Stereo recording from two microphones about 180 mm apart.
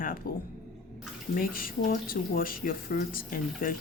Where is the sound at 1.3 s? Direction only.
50° left (ahead or behind).